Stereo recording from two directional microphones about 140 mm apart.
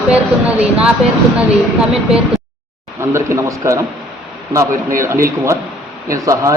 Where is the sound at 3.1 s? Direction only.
20° right (ahead or behind).